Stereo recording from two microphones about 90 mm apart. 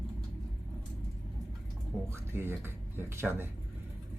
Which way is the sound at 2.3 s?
25° right (ahead or behind).